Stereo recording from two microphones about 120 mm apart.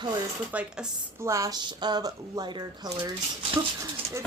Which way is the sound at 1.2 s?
25° right (ahead or behind).